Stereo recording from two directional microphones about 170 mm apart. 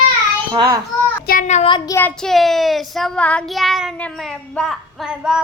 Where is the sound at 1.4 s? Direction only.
45° left (ahead or behind).